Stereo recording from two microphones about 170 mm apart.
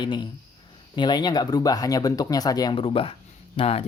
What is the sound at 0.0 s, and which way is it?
Speech, 25° left (ahead or behind).